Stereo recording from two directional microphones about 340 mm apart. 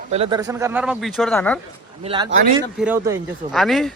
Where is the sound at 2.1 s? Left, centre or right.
Centre.